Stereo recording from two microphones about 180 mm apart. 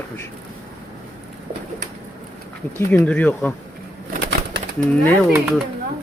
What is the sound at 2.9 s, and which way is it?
Speech, 10° left (ahead or behind).